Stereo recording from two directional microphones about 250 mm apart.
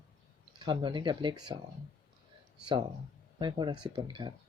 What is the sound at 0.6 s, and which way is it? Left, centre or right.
Speech, centre.